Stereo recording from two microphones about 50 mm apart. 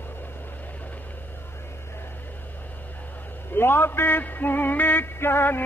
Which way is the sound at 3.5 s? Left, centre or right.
Left.